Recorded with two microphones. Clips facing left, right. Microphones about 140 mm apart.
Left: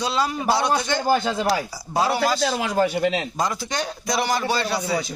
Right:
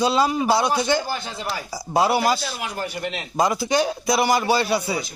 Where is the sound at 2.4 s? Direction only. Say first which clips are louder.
Left 8 dB; 90° left.